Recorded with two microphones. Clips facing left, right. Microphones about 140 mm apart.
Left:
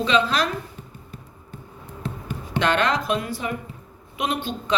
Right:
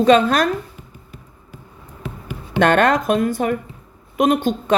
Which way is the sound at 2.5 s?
50° right (ahead or behind).